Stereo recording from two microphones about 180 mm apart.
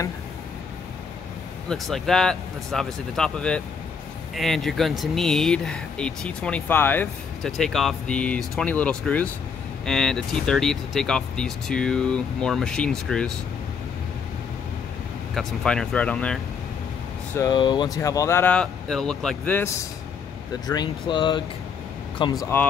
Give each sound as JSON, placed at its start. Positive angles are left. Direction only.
{"t": 1.7, "sound": "speech", "side_deg": 0}
{"t": 7.5, "sound": "speech", "side_deg": 0}
{"t": 15.3, "sound": "speech", "side_deg": 5}
{"t": 17.4, "sound": "speech", "side_deg": 25}
{"t": 20.6, "sound": "speech", "side_deg": 25}